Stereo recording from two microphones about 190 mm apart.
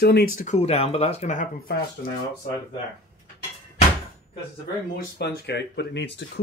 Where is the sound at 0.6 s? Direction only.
30° left (ahead or behind).